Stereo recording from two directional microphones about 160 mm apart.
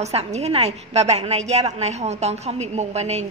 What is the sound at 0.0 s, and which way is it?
A woman's voice, 40° right (ahead or behind).